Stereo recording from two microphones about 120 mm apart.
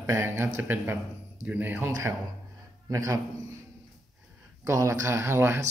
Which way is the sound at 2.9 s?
30° right (ahead or behind).